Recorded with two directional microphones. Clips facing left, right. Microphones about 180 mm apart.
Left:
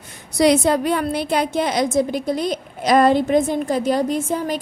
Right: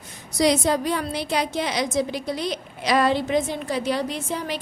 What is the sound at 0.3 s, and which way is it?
A woman's voice, 60° left (ahead or behind).